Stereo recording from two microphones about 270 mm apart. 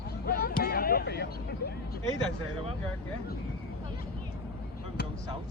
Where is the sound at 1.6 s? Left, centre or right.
Left.